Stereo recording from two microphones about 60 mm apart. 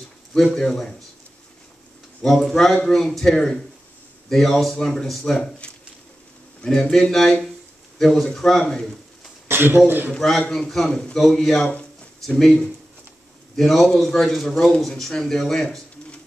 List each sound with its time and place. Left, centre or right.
0.3 s a man's voice: centre
2.2 s speech: centre
2.7 s a man's voice: centre
3.0 s speech: centre
6.6 s a man's voice: centre
9.5 s a sound: right
9.8 s a man's voice: right
10.1 s a man's voice: centre